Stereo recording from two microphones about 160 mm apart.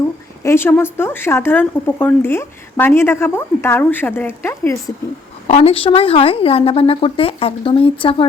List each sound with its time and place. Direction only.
0.4 s speech: 15° left (ahead or behind)
5.5 s a woman's voice: 40° left (ahead or behind)